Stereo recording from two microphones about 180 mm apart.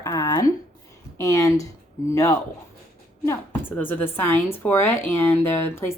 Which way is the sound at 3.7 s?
10° left (ahead or behind).